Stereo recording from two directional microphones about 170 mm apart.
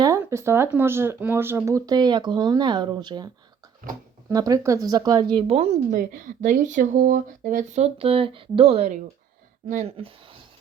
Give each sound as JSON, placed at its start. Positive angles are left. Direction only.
{"t": 0.0, "sound": "speech", "side_deg": -15}
{"t": 4.3, "sound": "speech", "side_deg": -20}
{"t": 5.9, "sound": "speech", "side_deg": -50}